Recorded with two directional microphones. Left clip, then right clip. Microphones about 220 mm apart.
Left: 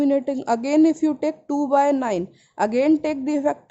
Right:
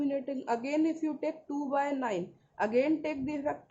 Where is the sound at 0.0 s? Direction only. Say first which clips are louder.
Left 12 dB; 50° left (ahead or behind).